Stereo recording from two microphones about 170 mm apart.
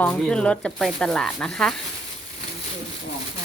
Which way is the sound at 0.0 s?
5° left (ahead or behind).